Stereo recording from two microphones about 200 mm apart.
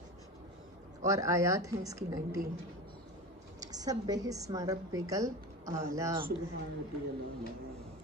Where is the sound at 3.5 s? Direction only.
20° right (ahead or behind).